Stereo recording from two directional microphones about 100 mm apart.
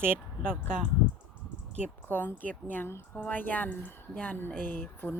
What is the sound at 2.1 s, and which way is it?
Speech, 20° left (ahead or behind).